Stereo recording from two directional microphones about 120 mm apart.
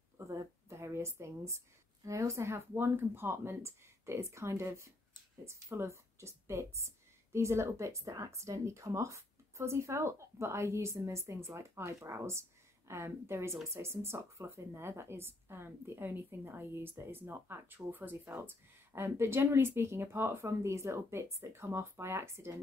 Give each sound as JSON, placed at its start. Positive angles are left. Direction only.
{"t": 0.3, "sound": "a woman's voice", "side_deg": -25}